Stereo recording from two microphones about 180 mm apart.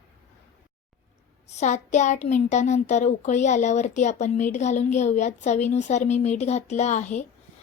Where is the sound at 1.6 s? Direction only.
40° left (ahead or behind).